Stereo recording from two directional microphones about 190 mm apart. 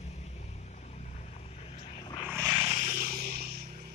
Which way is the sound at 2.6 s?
35° right (ahead or behind).